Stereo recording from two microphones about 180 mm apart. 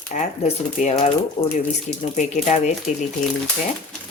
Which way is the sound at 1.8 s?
40° left (ahead or behind).